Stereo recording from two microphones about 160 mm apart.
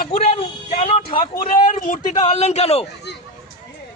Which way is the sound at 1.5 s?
55° left (ahead or behind).